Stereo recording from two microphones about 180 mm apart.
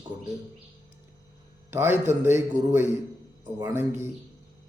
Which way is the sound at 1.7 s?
10° right (ahead or behind).